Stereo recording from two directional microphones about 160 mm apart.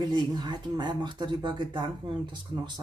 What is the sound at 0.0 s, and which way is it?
Speech, 25° right (ahead or behind).